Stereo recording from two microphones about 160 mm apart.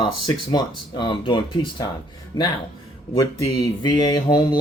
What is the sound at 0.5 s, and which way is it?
Speech, 25° left (ahead or behind).